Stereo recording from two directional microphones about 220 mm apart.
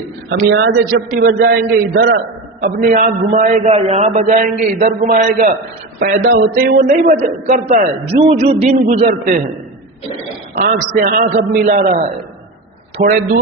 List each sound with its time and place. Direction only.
0.3 s a man's voice: 50° right (ahead or behind)
10.6 s a man's voice: 40° right (ahead or behind)